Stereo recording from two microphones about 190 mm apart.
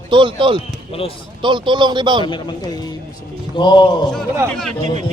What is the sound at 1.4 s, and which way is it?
Speech, 25° right (ahead or behind).